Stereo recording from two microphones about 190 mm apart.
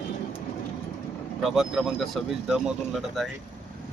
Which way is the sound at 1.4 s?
Centre (ahead or behind).